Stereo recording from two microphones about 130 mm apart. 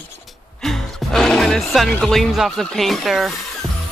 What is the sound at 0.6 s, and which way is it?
Music, 5° left (ahead or behind).